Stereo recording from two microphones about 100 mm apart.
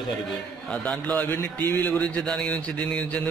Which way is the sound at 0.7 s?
10° left (ahead or behind).